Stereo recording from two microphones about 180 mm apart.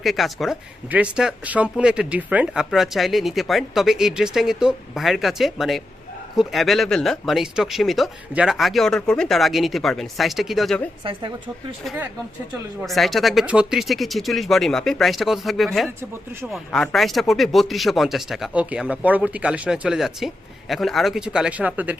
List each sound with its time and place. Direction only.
0.0 s speech: centre (ahead or behind)
11.0 s speech: 25° right (ahead or behind)
12.8 s speech: centre (ahead or behind)